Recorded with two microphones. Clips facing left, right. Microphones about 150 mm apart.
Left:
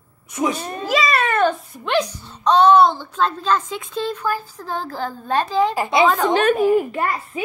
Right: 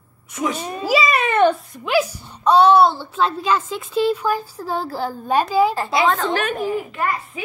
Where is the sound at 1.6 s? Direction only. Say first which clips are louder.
Right 1 dB; centre (ahead or behind).